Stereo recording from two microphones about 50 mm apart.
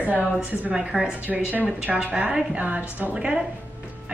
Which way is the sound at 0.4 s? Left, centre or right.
Right.